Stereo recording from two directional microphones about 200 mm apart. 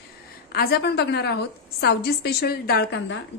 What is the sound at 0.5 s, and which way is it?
A woman's voice, 50° left (ahead or behind).